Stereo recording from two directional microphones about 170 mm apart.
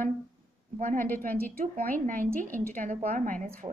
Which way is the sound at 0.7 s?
50° right (ahead or behind).